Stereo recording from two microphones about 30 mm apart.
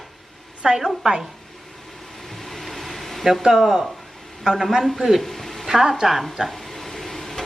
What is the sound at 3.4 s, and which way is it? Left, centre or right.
Speech, centre.